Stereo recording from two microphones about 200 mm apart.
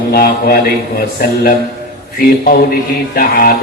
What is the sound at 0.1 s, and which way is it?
A man's voice, 50° left (ahead or behind).